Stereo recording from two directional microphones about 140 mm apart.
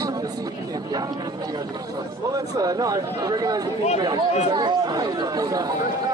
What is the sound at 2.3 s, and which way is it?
Speech, 25° right (ahead or behind).